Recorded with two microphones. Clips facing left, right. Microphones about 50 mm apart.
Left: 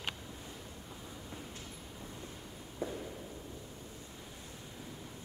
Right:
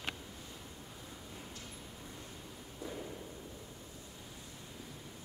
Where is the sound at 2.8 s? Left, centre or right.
Left.